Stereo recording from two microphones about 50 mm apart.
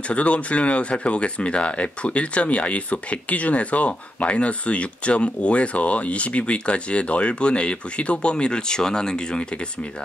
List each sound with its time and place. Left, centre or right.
0.1 s speech: left